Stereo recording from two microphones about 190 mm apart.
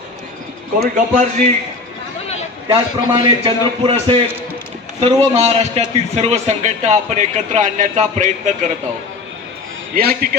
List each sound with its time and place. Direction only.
0.8 s a man's voice: 40° right (ahead or behind)
2.6 s a man's voice: 25° right (ahead or behind)
9.9 s a man's voice: 50° right (ahead or behind)